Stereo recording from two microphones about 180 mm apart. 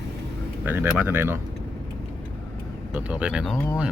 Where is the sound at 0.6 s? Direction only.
10° right (ahead or behind).